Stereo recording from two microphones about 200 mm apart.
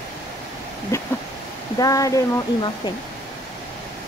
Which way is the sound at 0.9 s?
15° left (ahead or behind).